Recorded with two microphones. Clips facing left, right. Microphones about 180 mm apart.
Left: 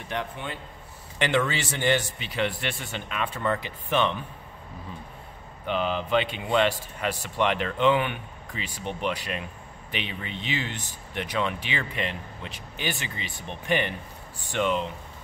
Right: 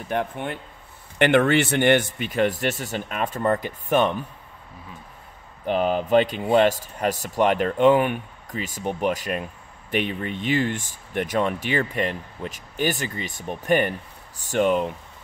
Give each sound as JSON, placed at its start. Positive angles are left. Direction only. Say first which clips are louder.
{"t": 0.1, "sound": "speech", "louder": "right 6 dB", "side_deg": -55}
{"t": 5.7, "sound": "speech", "louder": "right 5 dB", "side_deg": -45}